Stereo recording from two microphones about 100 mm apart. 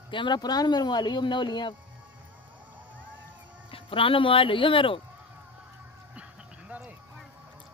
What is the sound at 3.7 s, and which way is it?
Speech, 65° left (ahead or behind).